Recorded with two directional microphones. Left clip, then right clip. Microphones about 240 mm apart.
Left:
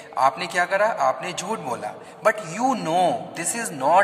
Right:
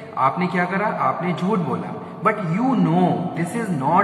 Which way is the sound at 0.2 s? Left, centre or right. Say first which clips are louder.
Even; left.